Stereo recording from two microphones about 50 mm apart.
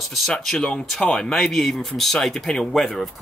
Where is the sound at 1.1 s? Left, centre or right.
Centre.